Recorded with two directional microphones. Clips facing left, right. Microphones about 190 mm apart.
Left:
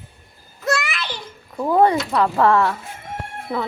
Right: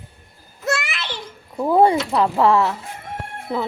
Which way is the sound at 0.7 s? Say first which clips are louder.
Left 1 dB; 25° right (ahead or behind).